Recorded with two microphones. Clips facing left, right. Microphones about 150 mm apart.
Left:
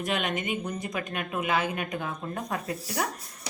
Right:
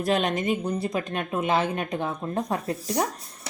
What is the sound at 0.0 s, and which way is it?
Speech, 35° right (ahead or behind).